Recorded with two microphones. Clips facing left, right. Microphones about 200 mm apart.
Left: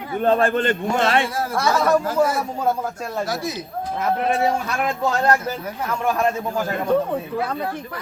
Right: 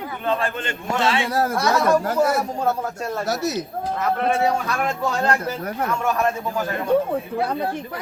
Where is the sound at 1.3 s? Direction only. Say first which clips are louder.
Right 4 dB; 45° right (ahead or behind).